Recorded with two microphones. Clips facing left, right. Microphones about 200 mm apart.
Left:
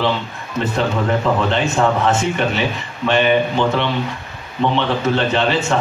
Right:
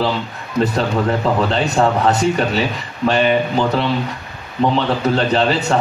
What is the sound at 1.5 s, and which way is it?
A man's voice, 35° right (ahead or behind).